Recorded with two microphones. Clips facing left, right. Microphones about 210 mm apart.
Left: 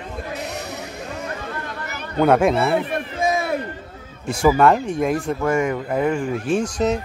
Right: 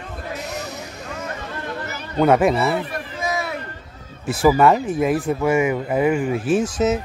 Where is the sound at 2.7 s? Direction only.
50° left (ahead or behind).